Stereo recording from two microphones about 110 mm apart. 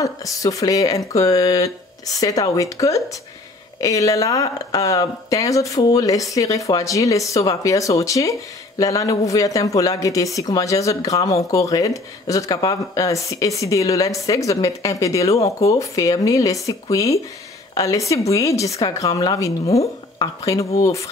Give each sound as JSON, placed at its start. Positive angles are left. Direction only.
{"t": 0.0, "sound": "a woman's voice", "side_deg": 30}